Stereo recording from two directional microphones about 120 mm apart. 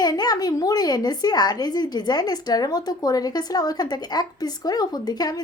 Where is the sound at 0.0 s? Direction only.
35° left (ahead or behind).